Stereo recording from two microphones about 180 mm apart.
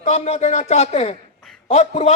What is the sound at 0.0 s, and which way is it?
Speech, 40° left (ahead or behind).